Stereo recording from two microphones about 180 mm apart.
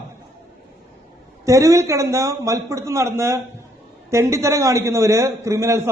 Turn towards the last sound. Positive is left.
turn(degrees=-15)  # may be behind; listen again after turning